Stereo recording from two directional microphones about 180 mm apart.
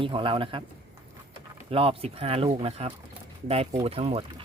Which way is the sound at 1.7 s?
30° right (ahead or behind).